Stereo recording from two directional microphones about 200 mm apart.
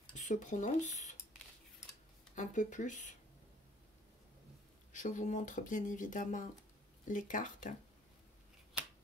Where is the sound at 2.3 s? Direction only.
40° left (ahead or behind).